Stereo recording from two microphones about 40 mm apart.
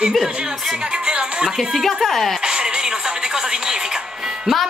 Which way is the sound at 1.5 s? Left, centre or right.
Centre.